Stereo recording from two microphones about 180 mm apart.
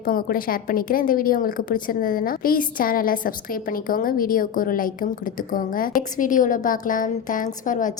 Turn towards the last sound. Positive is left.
turn(degrees=45)  # may be behind; listen again after turning